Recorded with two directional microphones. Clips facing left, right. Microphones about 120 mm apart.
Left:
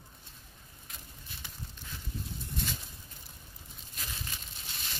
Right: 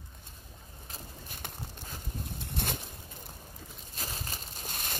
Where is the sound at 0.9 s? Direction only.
50° right (ahead or behind).